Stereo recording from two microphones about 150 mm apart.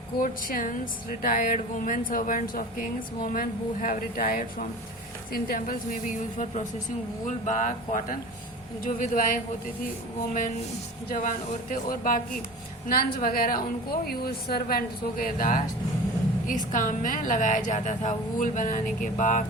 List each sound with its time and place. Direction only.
0.2 s a woman's voice: 70° left (ahead or behind)
11.1 s a woman's voice: 65° left (ahead or behind)
16.7 s a woman's voice: 60° left (ahead or behind)